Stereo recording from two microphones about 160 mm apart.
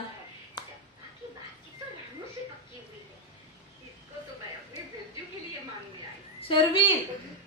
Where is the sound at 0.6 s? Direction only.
25° left (ahead or behind).